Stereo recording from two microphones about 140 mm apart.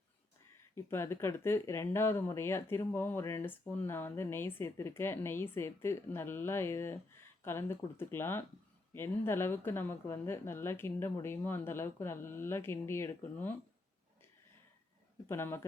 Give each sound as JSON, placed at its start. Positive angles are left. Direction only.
{"t": 0.8, "sound": "speech", "side_deg": 15}
{"t": 15.3, "sound": "speech", "side_deg": 15}